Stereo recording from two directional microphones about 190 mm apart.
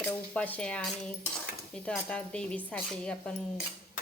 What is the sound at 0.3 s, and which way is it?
Speech, 5° left (ahead or behind).